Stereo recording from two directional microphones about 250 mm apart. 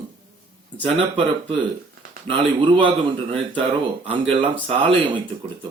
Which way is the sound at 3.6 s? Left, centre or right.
Right.